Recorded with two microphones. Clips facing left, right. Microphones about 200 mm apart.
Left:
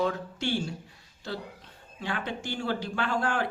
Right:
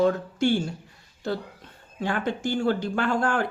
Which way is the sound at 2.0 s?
50° right (ahead or behind).